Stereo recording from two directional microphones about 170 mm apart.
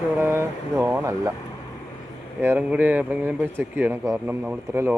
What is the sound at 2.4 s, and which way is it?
Speech, 10° right (ahead or behind).